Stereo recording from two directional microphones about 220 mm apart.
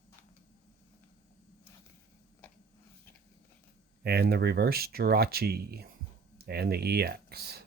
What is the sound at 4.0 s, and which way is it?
Speech, 45° right (ahead or behind).